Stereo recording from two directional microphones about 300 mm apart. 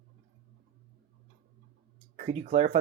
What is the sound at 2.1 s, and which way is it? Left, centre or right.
Speech, right.